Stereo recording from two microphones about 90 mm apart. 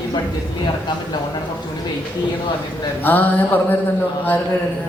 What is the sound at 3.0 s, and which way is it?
Speech, 20° left (ahead or behind).